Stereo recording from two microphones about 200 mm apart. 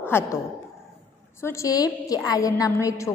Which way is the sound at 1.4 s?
15° left (ahead or behind).